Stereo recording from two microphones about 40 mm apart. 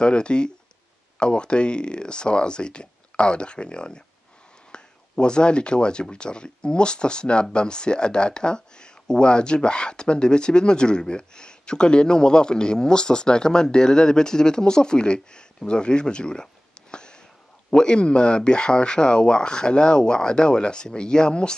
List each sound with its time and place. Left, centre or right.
0.0 s speech: left
16.9 s a sound: left
17.6 s speech: left